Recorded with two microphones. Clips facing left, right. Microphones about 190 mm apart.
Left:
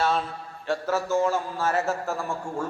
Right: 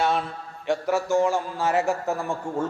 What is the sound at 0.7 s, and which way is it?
A man's voice, 15° right (ahead or behind).